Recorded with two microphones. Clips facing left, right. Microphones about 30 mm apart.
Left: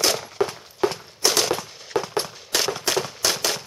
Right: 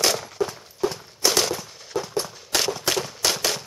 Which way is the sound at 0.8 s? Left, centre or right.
Left.